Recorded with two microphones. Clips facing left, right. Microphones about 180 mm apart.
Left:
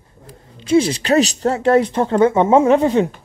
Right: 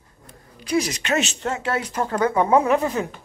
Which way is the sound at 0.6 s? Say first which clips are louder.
Left 8 dB; 30° left (ahead or behind).